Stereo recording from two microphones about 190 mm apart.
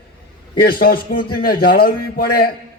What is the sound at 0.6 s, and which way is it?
A man's voice, 55° left (ahead or behind).